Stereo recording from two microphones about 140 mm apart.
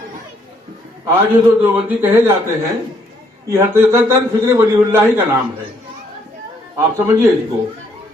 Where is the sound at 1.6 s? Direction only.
15° right (ahead or behind).